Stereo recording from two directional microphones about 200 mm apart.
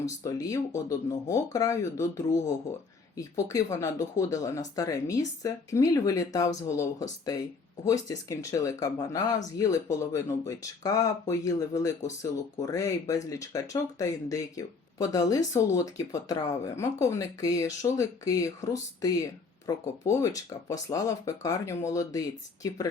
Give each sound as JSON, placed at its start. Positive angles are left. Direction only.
{"t": 0.0, "sound": "speech", "side_deg": 15}